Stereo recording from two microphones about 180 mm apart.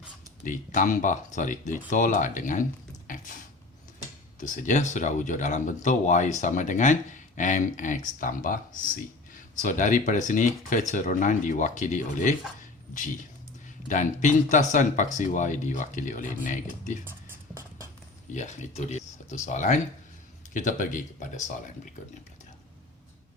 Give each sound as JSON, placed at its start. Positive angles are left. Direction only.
{"t": 0.4, "sound": "speech", "side_deg": 45}
{"t": 3.1, "sound": "a sound", "side_deg": 50}
{"t": 4.4, "sound": "speech", "side_deg": 45}
{"t": 13.8, "sound": "speech", "side_deg": 45}
{"t": 18.3, "sound": "speech", "side_deg": 40}